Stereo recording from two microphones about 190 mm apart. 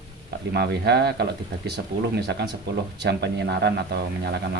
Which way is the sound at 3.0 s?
60° right (ahead or behind).